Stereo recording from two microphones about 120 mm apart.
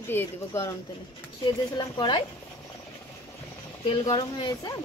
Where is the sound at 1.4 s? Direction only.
35° left (ahead or behind).